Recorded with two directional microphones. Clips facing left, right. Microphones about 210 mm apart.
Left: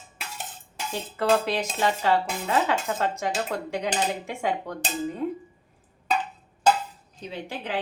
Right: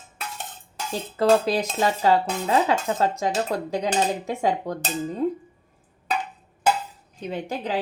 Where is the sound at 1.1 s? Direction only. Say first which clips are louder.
Right 4 dB; 35° right (ahead or behind).